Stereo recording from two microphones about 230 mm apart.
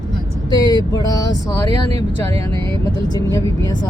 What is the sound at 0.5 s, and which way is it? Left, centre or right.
Speech, centre.